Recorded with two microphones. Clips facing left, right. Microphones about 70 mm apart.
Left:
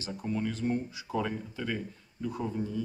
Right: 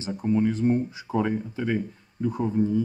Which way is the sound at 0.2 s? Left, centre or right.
Right.